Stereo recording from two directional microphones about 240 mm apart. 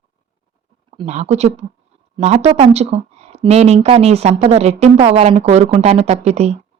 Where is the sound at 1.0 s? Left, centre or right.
Right.